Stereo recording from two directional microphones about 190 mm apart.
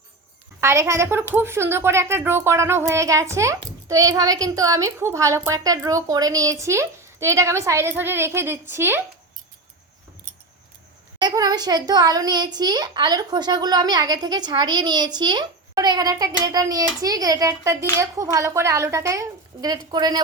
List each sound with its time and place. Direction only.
0.6 s speech: 15° right (ahead or behind)
11.2 s a woman's voice: 20° right (ahead or behind)